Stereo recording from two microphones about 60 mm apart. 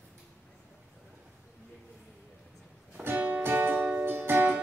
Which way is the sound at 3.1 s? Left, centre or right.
Right.